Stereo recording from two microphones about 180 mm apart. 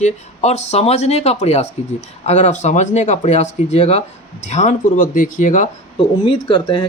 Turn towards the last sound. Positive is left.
turn(degrees=30)  # may be behind; listen again after turning